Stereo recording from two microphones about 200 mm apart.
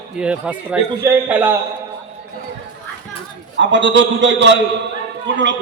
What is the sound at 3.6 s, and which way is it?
A man's voice, 65° right (ahead or behind).